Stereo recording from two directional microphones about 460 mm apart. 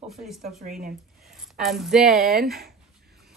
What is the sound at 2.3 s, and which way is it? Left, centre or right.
Speech, centre.